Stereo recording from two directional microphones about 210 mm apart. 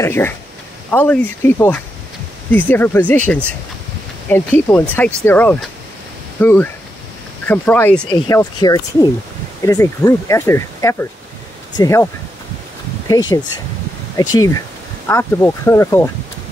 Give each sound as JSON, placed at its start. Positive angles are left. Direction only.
{"t": 0.0, "sound": "speech", "side_deg": 10}
{"t": 8.1, "sound": "speech", "side_deg": 20}
{"t": 13.1, "sound": "speech", "side_deg": 20}